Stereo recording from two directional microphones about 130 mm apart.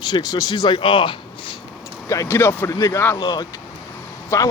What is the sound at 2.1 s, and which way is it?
Speech, 20° left (ahead or behind).